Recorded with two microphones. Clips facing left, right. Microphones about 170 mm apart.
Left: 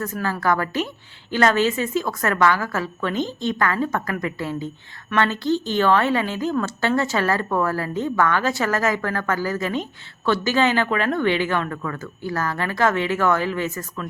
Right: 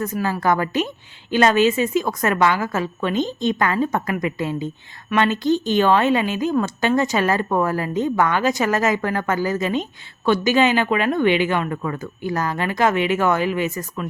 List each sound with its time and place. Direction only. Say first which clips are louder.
0.0 s a woman's voice: right 2 dB; 15° right (ahead or behind)